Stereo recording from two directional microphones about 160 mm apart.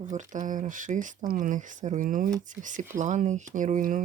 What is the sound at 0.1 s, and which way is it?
Speech, 50° right (ahead or behind).